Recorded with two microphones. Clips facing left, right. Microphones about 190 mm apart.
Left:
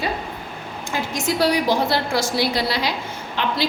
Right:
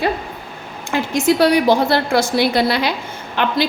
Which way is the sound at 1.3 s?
60° right (ahead or behind).